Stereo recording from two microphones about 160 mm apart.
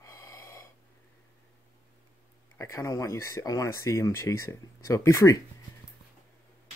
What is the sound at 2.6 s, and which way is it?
Speech, 20° left (ahead or behind).